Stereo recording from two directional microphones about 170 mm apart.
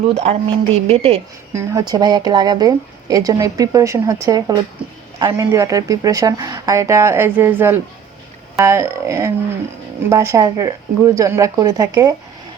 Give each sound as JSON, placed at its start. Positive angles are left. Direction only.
{"t": 0.1, "sound": "speech", "side_deg": -35}
{"t": 1.5, "sound": "speech", "side_deg": -20}